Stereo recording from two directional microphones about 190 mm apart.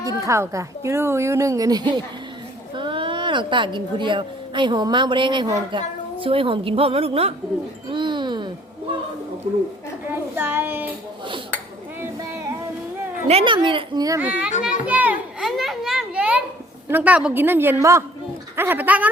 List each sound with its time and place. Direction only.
0.3 s a woman's voice: 15° right (ahead or behind); by 7.3 s 30° right (ahead or behind)
7.9 s a sound: 25° right (ahead or behind)
10.1 s a woman's voice: 10° right (ahead or behind)
11.9 s a sound: 15° right (ahead or behind)
13.2 s speech: 30° right (ahead or behind)
14.2 s a woman's voice: 5° right (ahead or behind)
14.6 s children playing: 5° right (ahead or behind)
16.9 s a woman's voice: 10° right (ahead or behind)